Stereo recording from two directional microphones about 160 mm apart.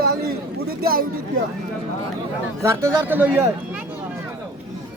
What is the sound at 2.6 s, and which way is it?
Speech, 15° right (ahead or behind).